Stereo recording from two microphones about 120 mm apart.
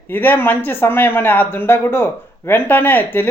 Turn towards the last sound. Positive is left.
turn(degrees=15)  # may be behind; listen again after turning